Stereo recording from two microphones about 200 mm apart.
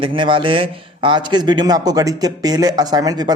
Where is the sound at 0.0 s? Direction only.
25° right (ahead or behind).